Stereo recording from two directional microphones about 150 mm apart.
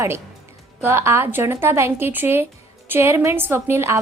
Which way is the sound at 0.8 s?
15° right (ahead or behind).